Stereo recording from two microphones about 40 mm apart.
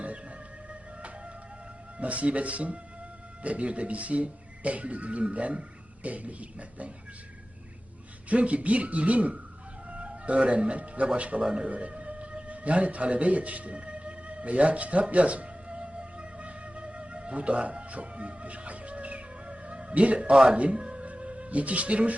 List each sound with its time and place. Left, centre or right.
0.0 s music: right
2.0 s speech: right
8.3 s speech: right
11.7 s music: right
20.3 s speech: centre
20.6 s music: right